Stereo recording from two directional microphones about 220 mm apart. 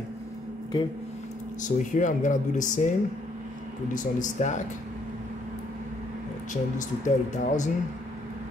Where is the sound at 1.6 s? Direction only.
35° left (ahead or behind).